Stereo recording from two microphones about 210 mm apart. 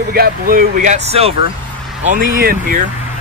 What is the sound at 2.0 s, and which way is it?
Speech, 40° right (ahead or behind).